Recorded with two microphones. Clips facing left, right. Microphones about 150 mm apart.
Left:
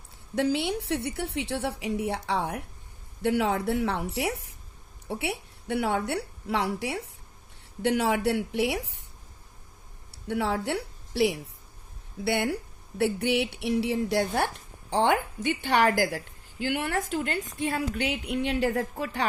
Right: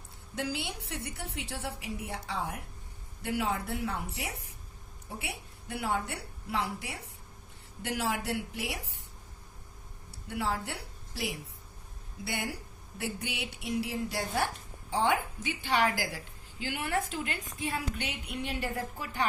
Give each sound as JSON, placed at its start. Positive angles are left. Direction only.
{"t": 0.3, "sound": "a woman's voice", "side_deg": 65}
{"t": 7.8, "sound": "a woman's voice", "side_deg": 60}
{"t": 10.1, "sound": "a woman's voice", "side_deg": 65}
{"t": 16.8, "sound": "a woman's voice", "side_deg": 35}
{"t": 18.0, "sound": "a woman's voice", "side_deg": 65}